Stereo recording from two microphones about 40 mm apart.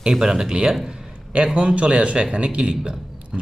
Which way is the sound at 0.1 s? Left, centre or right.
Centre.